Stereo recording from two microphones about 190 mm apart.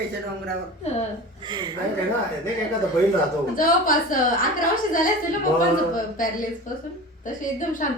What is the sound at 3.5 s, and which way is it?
Speech, 45° left (ahead or behind).